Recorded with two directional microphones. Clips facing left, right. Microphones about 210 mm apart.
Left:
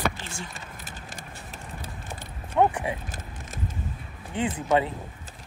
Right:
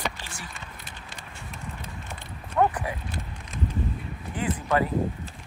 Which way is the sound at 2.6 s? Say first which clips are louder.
Left 1 dB; 25° left (ahead or behind).